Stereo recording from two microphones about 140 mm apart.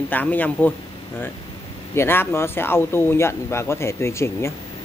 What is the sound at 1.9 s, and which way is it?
Speech, 15° left (ahead or behind).